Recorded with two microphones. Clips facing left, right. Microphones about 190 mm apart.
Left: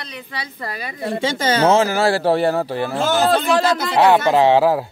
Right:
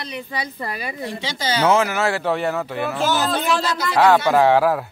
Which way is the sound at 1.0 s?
50° left (ahead or behind).